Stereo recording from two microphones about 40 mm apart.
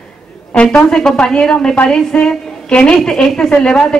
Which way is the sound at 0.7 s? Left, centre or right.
Centre.